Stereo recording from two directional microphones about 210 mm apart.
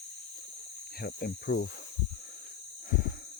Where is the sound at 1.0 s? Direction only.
50° left (ahead or behind).